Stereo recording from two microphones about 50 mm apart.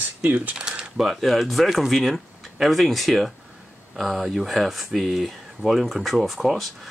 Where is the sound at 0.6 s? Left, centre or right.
Centre.